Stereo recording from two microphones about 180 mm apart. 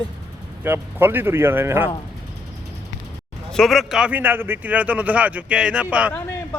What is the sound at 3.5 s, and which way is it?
A man's voice, centre (ahead or behind).